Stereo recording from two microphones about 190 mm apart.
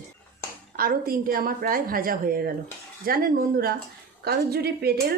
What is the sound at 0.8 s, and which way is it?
A woman's voice, 50° right (ahead or behind).